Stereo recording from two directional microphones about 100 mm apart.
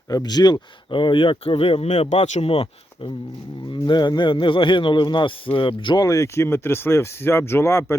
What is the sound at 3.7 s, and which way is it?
Speech, 50° left (ahead or behind).